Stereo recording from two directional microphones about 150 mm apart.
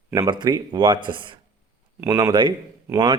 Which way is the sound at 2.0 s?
20° right (ahead or behind).